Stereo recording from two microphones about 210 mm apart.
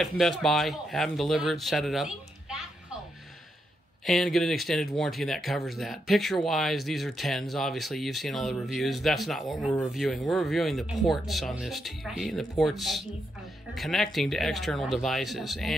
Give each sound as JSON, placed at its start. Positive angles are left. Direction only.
{"t": 0.0, "sound": "speech", "side_deg": 0}
{"t": 4.0, "sound": "speech", "side_deg": 0}